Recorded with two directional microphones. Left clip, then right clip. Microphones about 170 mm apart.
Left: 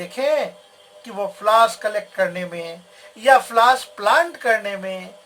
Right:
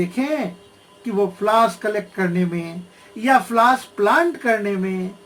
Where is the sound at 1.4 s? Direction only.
30° left (ahead or behind).